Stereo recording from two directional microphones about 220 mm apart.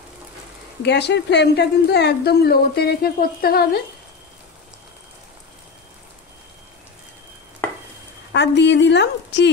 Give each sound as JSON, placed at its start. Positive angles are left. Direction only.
{"t": 0.8, "sound": "a woman's voice", "side_deg": 50}
{"t": 8.3, "sound": "a woman's voice", "side_deg": 50}